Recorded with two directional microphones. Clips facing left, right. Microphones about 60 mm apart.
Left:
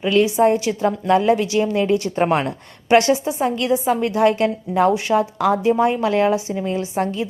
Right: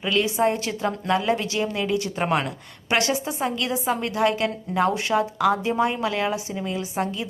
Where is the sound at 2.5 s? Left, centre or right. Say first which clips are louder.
Left 10 dB; left.